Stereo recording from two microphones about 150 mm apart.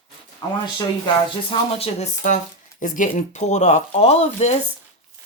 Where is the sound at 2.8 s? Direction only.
60° left (ahead or behind).